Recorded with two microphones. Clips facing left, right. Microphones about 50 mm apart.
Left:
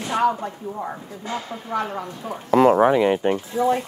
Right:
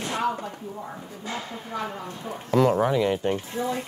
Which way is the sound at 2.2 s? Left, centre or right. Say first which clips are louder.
Left 5 dB; left.